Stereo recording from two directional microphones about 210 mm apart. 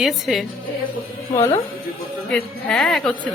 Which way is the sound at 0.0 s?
Centre (ahead or behind).